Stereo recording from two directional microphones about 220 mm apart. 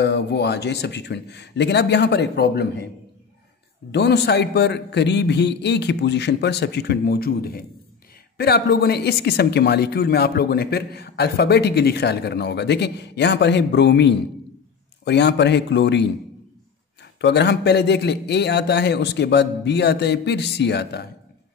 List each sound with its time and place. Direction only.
0.0 s a woman's voice: 50° left (ahead or behind)
3.9 s a woman's voice: 50° left (ahead or behind)